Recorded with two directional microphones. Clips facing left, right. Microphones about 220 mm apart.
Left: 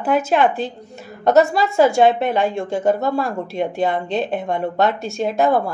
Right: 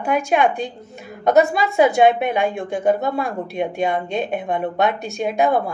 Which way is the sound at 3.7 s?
15° right (ahead or behind).